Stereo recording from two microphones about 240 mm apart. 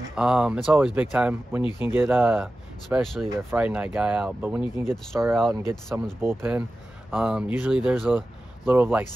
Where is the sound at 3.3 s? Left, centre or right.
Centre.